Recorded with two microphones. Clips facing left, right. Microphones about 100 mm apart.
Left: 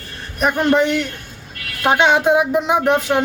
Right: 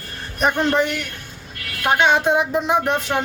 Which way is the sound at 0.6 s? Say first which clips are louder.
Left 4 dB; 15° left (ahead or behind).